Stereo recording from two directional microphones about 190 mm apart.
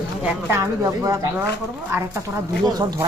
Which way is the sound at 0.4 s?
15° right (ahead or behind).